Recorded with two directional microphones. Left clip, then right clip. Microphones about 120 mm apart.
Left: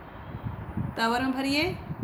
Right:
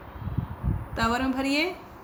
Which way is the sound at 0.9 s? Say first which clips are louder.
Right 1 dB; 20° right (ahead or behind).